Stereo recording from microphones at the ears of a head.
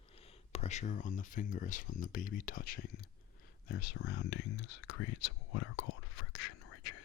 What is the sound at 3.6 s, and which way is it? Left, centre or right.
Whispering, left.